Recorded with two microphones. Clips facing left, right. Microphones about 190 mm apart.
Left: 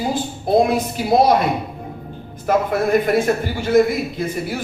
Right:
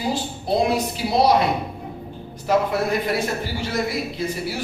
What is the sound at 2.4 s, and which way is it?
A man's voice, 50° left (ahead or behind).